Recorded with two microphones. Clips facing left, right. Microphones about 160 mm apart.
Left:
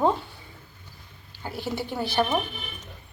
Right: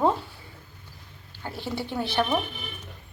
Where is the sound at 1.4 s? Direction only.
5° left (ahead or behind).